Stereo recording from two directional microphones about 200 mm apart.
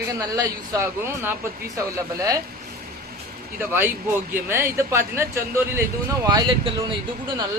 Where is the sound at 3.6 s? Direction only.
10° right (ahead or behind).